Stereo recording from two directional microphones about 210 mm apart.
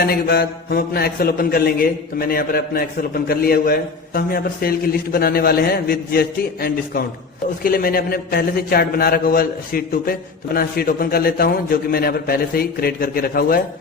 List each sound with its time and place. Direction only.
0.0 s a man's voice: 50° left (ahead or behind)